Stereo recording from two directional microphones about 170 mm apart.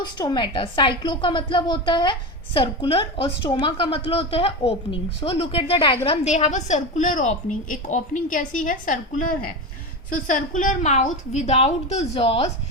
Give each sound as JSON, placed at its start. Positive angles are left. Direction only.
{"t": 0.0, "sound": "a woman's voice", "side_deg": 25}